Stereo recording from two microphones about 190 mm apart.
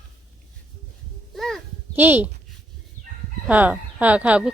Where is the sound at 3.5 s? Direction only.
10° right (ahead or behind).